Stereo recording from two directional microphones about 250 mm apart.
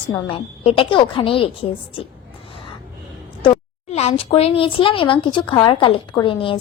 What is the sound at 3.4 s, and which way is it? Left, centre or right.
Speech, left.